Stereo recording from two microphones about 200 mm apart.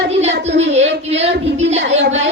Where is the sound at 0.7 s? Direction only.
30° right (ahead or behind).